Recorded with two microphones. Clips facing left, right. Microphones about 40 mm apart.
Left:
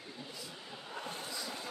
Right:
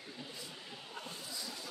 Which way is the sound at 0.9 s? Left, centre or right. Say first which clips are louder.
Left 5 dB; left.